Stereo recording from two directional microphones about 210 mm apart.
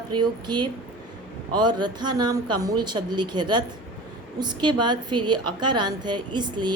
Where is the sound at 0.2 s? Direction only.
20° right (ahead or behind).